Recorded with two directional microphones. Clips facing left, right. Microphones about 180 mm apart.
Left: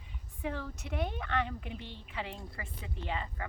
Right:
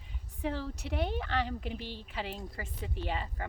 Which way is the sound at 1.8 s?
90° right.